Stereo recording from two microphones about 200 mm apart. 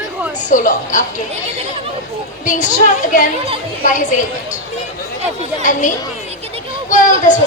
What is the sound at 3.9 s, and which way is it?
Speech, 40° left (ahead or behind).